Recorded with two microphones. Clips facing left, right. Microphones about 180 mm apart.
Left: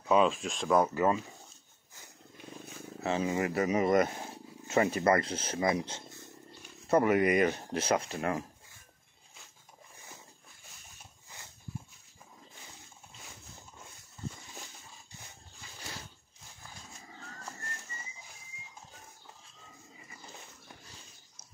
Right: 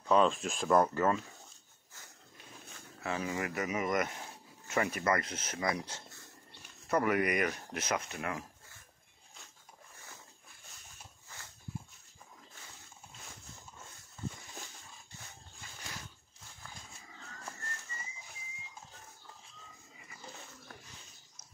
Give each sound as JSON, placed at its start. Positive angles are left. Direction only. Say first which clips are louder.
{"t": 0.0, "sound": "speech", "louder": "left 1 dB", "side_deg": 5}
{"t": 3.0, "sound": "speech", "louder": "left 5 dB", "side_deg": 25}